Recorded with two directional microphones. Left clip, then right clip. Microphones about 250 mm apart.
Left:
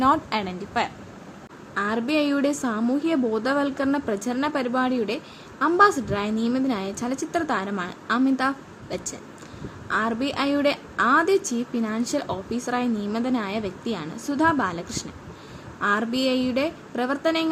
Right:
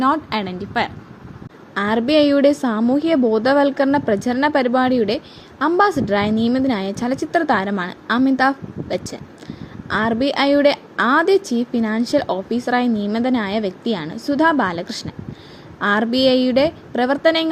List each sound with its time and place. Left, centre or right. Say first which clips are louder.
0.0 s a woman's voice: right 3 dB; centre